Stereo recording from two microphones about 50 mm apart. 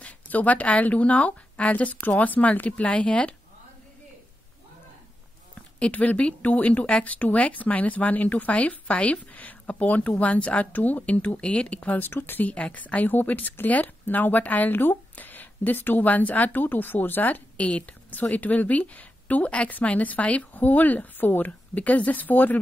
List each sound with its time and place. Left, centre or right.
0.0 s speech: left
5.8 s speech: left
7.1 s speech: left
11.3 s speech: centre
12.0 s speech: left
12.5 s speech: left
17.6 s a woman's voice: left